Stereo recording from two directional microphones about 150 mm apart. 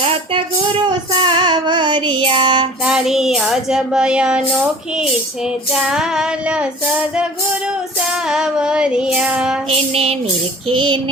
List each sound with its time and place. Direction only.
0.9 s child singing: 30° right (ahead or behind)
2.8 s speech: 5° right (ahead or behind)
5.7 s speech: 5° right (ahead or behind)
9.6 s child singing: 40° right (ahead or behind)